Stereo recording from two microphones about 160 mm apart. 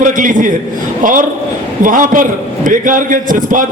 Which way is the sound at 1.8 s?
55° right (ahead or behind).